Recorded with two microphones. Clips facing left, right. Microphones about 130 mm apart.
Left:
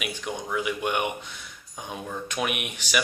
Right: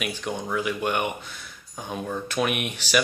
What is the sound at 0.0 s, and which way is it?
Speech, 5° left (ahead or behind).